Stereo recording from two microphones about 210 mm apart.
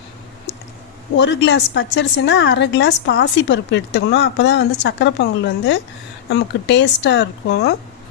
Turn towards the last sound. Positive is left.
turn(degrees=55)  # may be behind; listen again after turning